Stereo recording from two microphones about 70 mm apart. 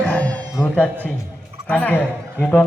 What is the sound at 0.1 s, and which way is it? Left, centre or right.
Cat, left.